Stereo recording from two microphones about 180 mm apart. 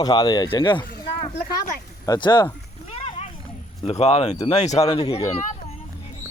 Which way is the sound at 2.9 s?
35° left (ahead or behind).